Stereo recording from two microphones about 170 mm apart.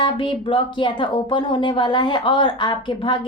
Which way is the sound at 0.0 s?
30° left (ahead or behind).